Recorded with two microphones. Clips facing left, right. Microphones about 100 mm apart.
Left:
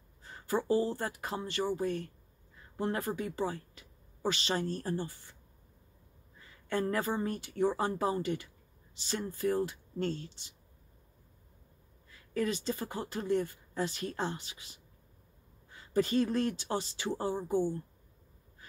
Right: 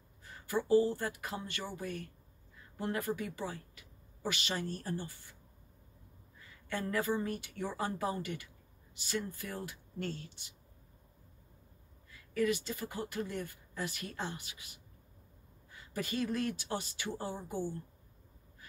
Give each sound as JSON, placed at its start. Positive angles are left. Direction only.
{"t": 0.2, "sound": "a woman's voice", "side_deg": 35}
{"t": 6.7, "sound": "speech", "side_deg": 35}
{"t": 12.4, "sound": "speech", "side_deg": 30}